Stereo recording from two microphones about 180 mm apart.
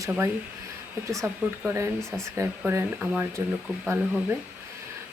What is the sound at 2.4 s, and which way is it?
Speech, 15° right (ahead or behind).